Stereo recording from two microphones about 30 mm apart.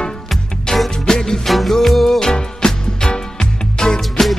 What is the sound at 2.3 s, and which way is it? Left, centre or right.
Music, left.